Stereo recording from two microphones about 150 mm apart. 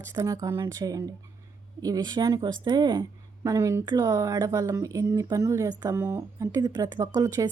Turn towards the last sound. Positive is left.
turn(degrees=-20)  # may be behind; listen again after turning